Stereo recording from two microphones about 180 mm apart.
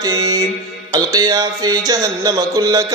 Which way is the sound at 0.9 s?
20° right (ahead or behind).